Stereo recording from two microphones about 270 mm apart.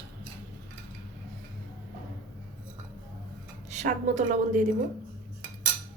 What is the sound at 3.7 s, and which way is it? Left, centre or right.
Speech, right.